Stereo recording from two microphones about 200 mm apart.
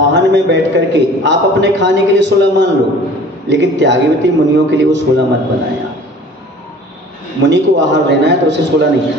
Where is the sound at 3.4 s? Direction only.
60° right (ahead or behind).